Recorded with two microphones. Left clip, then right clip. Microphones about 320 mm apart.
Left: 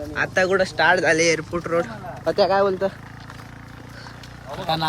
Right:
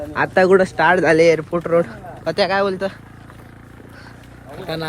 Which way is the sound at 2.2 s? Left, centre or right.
Right.